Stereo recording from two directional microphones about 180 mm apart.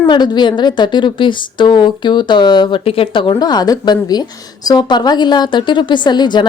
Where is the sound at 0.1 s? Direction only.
25° left (ahead or behind).